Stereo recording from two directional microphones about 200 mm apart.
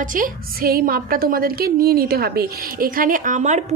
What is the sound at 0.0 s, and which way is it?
A woman's voice, 40° right (ahead or behind).